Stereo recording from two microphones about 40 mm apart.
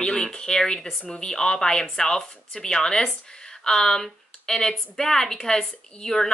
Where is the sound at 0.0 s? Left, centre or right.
Centre.